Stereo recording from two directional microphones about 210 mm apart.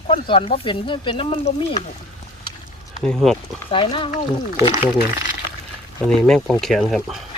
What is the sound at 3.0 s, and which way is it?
Speech, centre (ahead or behind).